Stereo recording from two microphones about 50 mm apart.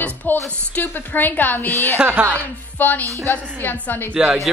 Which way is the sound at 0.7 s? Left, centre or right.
Left.